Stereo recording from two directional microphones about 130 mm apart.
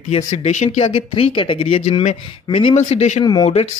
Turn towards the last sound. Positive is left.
turn(degrees=55)  # may be behind; listen again after turning